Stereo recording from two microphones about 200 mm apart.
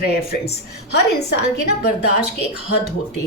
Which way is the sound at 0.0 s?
50° left (ahead or behind).